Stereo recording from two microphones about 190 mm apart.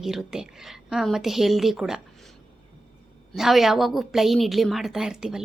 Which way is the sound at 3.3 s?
Centre (ahead or behind).